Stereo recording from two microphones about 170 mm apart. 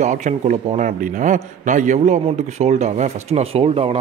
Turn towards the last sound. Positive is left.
turn(degrees=-35)  # may be behind; listen again after turning